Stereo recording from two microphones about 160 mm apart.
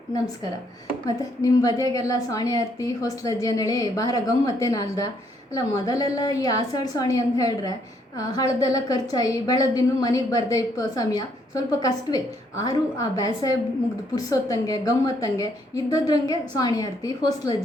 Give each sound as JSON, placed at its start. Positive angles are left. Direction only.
{"t": 1.0, "sound": "a woman's voice", "side_deg": 20}